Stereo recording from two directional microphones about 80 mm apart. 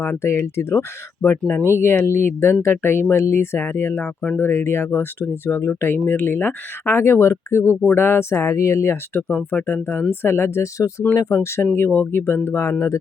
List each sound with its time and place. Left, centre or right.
0.0 s speech: left
4.0 s speech: centre
4.4 s speech: left
9.3 s speech: centre